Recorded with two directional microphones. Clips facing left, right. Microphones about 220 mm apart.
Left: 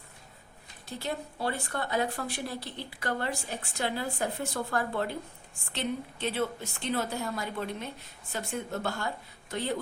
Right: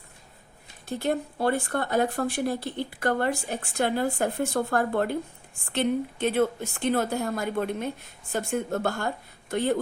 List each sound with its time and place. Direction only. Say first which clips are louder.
0.9 s speech: right 8 dB; 50° right (ahead or behind)